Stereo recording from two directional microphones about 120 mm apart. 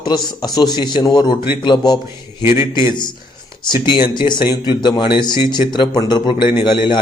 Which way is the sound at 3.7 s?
40° left (ahead or behind).